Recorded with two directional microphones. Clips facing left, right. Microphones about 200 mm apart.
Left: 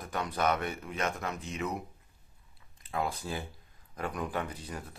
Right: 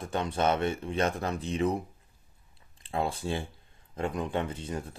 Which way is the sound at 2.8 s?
30° right (ahead or behind).